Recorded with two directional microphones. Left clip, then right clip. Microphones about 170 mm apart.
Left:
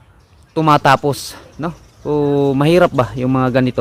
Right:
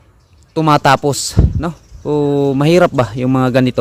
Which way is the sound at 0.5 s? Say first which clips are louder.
Right 1 dB; 20° right (ahead or behind).